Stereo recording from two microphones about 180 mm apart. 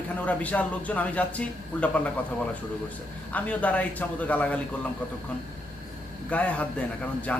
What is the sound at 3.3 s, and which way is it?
A man's voice, 10° left (ahead or behind).